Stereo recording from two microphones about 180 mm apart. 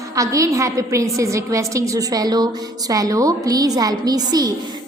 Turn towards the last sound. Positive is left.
turn(degrees=-20)  # may be behind; listen again after turning